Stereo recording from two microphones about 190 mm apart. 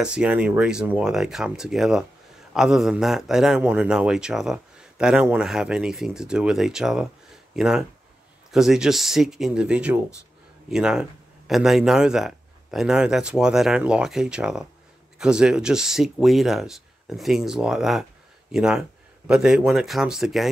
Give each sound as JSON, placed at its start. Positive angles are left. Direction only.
{"t": 0.0, "sound": "a man's voice", "side_deg": -5}